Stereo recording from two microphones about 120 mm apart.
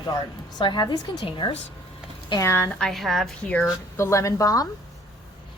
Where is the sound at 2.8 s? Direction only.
Centre (ahead or behind).